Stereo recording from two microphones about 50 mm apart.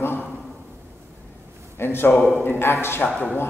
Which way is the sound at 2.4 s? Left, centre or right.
Left.